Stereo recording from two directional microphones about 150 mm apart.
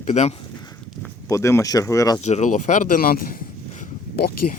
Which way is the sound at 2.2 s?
50° left (ahead or behind).